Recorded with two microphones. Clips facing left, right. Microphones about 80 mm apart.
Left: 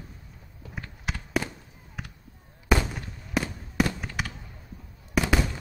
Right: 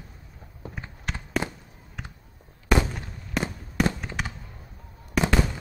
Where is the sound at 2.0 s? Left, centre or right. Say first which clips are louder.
Even; centre.